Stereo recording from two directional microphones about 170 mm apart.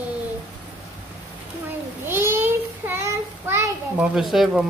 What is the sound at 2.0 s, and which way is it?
Child singing, 15° right (ahead or behind).